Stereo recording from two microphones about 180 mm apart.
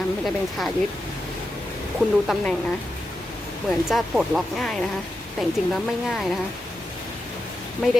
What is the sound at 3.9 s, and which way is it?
Speech, 5° right (ahead or behind).